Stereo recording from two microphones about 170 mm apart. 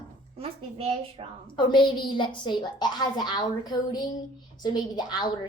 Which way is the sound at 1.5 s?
25° left (ahead or behind).